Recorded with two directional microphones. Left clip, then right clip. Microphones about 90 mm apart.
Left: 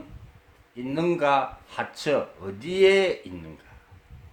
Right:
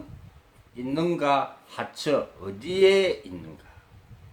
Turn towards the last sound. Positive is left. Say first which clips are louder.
# even
turn(degrees=40)  # may be behind; listen again after turning